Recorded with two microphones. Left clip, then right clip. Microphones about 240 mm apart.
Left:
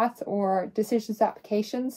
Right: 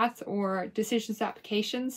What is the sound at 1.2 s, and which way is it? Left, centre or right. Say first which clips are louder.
Speech: left 5 dB; right.